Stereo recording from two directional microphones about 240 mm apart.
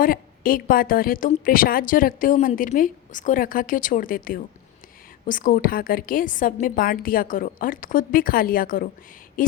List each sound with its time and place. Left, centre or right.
0.0 s a woman's voice: left